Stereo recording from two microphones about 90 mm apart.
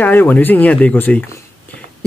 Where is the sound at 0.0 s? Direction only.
20° left (ahead or behind).